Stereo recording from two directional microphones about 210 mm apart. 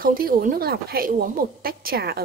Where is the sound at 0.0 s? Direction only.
45° right (ahead or behind).